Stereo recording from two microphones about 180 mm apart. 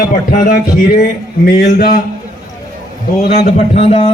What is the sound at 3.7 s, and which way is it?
Speech, 35° left (ahead or behind).